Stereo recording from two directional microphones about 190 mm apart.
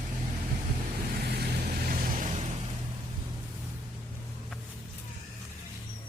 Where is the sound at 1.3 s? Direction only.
55° right (ahead or behind); by 2.5 s 35° right (ahead or behind).